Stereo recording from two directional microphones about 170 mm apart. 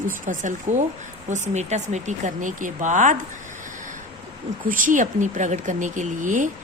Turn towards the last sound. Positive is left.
turn(degrees=-50)  # may be behind; listen again after turning